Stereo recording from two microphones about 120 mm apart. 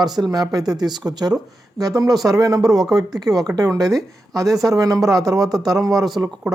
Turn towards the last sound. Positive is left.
turn(degrees=-30)  # may be behind; listen again after turning